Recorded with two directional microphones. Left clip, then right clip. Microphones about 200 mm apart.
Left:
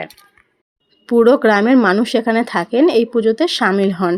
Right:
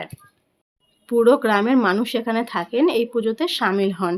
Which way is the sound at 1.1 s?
30° left (ahead or behind).